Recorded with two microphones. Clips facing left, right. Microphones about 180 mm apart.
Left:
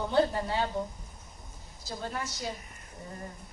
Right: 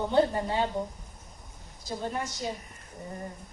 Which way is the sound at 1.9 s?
20° right (ahead or behind).